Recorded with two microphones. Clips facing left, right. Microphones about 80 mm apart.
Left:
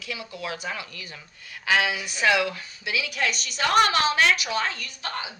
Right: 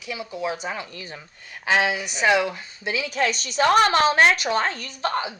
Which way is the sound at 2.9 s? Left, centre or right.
Right.